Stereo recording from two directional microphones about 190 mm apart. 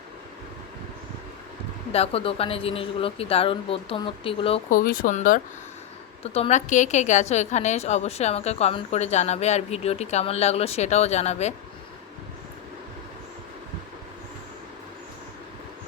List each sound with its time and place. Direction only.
1.9 s speech: 30° left (ahead or behind)
4.7 s speech: 50° left (ahead or behind)
6.2 s a woman's voice: 30° left (ahead or behind)